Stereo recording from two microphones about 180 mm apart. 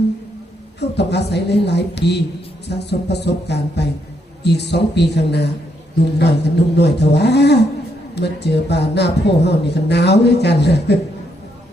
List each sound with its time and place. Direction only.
0.8 s speech: 70° left (ahead or behind)